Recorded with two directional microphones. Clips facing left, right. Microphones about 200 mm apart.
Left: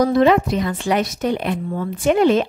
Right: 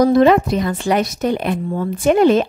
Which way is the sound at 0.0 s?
40° right (ahead or behind).